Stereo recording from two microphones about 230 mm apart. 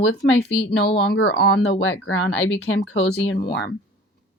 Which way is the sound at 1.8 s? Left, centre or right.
Left.